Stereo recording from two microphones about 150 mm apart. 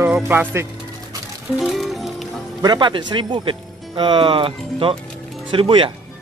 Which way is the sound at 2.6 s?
30° right (ahead or behind).